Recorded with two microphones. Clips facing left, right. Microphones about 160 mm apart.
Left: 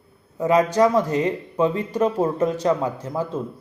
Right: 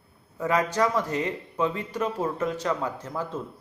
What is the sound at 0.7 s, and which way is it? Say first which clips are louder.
Speech: left 7 dB; 15° left (ahead or behind).